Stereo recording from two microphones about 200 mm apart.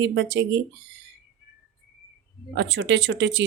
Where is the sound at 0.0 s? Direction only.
60° right (ahead or behind).